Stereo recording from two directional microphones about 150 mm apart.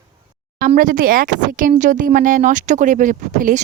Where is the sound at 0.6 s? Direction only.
65° right (ahead or behind).